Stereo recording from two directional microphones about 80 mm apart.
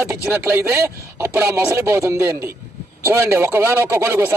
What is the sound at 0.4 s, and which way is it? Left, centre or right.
A man's voice, right.